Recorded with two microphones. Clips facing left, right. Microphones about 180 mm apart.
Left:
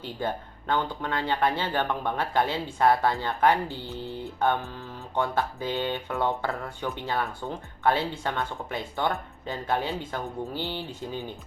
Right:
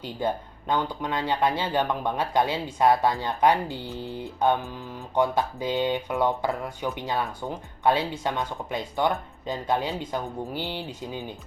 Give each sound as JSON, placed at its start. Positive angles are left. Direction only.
{"t": 0.0, "sound": "speech", "side_deg": -15}